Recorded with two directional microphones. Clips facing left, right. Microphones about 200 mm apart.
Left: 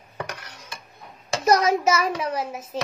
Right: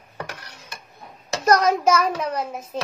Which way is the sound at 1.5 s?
5° left (ahead or behind).